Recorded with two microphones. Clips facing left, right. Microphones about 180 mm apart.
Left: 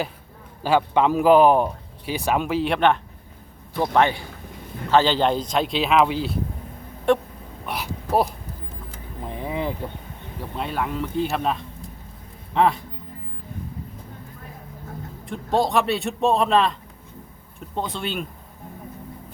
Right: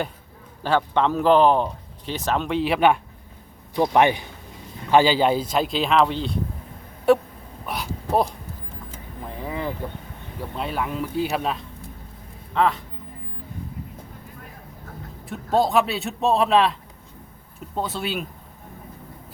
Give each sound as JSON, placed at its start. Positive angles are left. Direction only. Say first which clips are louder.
{"t": 0.6, "sound": "speech", "louder": "left 2 dB", "side_deg": 10}
{"t": 3.8, "sound": "a man's voice", "louder": "right 2 dB", "side_deg": -15}
{"t": 7.1, "sound": "a man's voice", "louder": "right 2 dB", "side_deg": -5}
{"t": 9.2, "sound": "vehicle", "louder": "left 2 dB", "side_deg": 20}
{"t": 10.6, "sound": "speech", "louder": "left 1 dB", "side_deg": 0}
{"t": 12.5, "sound": "speech", "louder": "left 2 dB", "side_deg": 15}
{"t": 15.2, "sound": "speech", "louder": "right 1 dB", "side_deg": -5}
{"t": 17.7, "sound": "speech", "louder": "right 1 dB", "side_deg": -5}